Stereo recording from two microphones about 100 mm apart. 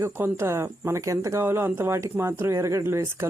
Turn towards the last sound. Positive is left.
turn(degrees=-25)  # may be behind; listen again after turning